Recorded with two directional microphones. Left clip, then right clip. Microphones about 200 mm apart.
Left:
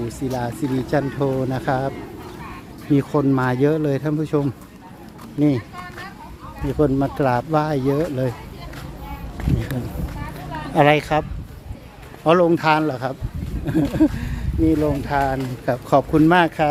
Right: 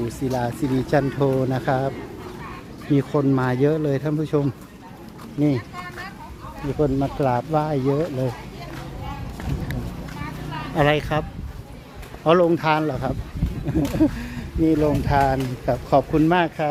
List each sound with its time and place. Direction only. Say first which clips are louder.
0.3 s speech: right 1 dB; centre (ahead or behind)
2.9 s speech: left 2 dB; 15° left (ahead or behind)
6.7 s speech: left 3 dB; 20° left (ahead or behind)
10.8 s speech: left 4 dB; 20° left (ahead or behind); by 15.4 s centre (ahead or behind)
15.6 s speech: left 2 dB; 15° left (ahead or behind)